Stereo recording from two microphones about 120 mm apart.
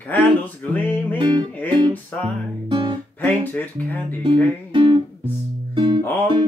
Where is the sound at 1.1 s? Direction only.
40° right (ahead or behind).